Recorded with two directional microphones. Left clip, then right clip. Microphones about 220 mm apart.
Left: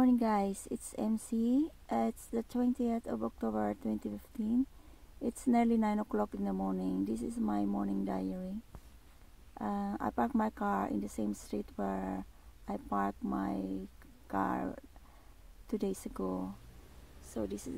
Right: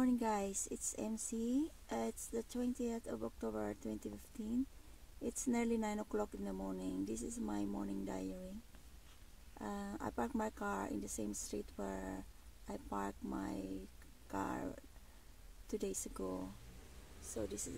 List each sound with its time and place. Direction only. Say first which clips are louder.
0.0 s speech: left 7 dB; 20° left (ahead or behind)
5.2 s speech: left 8 dB; 20° left (ahead or behind)
9.5 s speech: left 8 dB; 15° left (ahead or behind)